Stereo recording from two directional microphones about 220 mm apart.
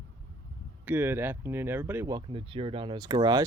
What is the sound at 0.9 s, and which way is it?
Speech, 10° right (ahead or behind).